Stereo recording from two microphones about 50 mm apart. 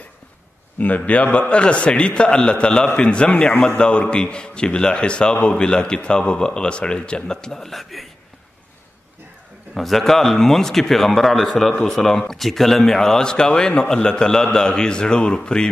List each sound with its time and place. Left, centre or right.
0.7 s a man's voice: left; by 8.1 s centre
9.8 s a man's voice: centre